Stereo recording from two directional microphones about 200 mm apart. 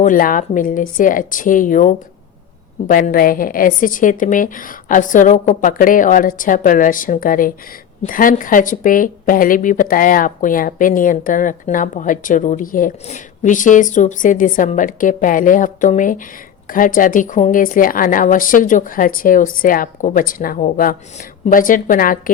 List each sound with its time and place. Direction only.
0.0 s a woman's voice: 45° left (ahead or behind)